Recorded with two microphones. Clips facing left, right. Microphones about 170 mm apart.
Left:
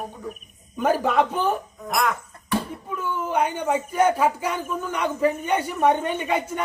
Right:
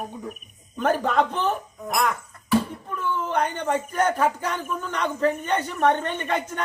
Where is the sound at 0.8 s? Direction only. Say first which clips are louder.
Left 1 dB; 10° left (ahead or behind).